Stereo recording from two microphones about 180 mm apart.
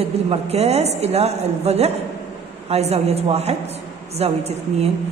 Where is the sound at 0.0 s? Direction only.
35° right (ahead or behind).